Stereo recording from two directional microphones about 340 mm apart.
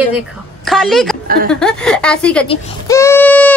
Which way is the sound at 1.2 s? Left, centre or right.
Right.